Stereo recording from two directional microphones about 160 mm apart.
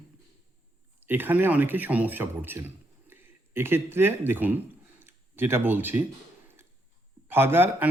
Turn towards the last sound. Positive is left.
turn(degrees=-15)  # may be behind; listen again after turning